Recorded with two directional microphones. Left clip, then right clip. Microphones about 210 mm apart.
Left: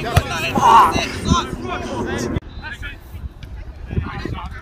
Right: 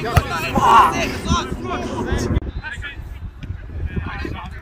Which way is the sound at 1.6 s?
50° right (ahead or behind).